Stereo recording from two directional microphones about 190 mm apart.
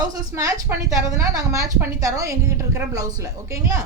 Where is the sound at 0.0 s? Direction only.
15° right (ahead or behind).